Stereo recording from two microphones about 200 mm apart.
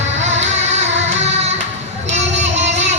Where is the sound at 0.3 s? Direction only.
35° right (ahead or behind).